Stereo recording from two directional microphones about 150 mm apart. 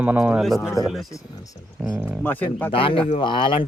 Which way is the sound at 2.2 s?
10° left (ahead or behind).